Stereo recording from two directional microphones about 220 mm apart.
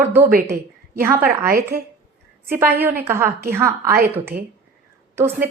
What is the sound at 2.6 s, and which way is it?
A woman's voice, 10° right (ahead or behind).